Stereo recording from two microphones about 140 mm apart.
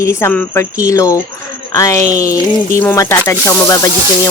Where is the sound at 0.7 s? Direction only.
25° left (ahead or behind).